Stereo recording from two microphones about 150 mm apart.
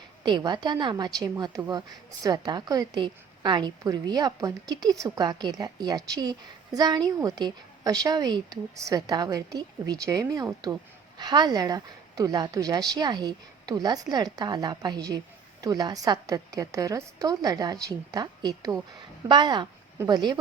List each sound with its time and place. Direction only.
0.2 s a woman's voice: 30° right (ahead or behind)